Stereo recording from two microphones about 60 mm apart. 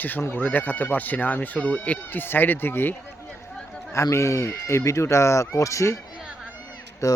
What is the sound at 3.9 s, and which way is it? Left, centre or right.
Speech, left.